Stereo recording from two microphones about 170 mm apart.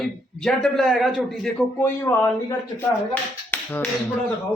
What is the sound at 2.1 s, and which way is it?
Speech, 20° left (ahead or behind).